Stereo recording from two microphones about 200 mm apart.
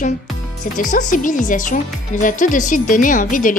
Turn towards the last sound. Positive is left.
turn(degrees=40)  # may be behind; listen again after turning